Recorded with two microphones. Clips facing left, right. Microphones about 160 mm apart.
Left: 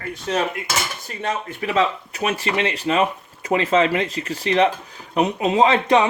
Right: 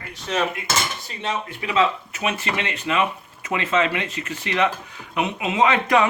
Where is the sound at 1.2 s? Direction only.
45° left (ahead or behind).